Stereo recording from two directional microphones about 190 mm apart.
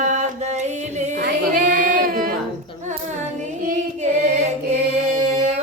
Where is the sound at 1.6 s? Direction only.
45° right (ahead or behind).